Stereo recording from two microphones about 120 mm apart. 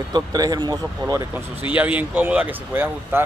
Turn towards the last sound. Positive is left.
turn(degrees=-15)  # may be behind; listen again after turning